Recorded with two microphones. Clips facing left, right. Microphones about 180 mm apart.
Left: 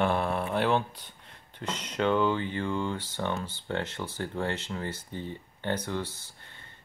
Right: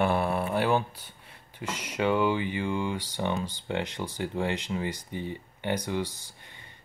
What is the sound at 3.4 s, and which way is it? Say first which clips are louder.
Speech: right 1 dB; 15° right (ahead or behind).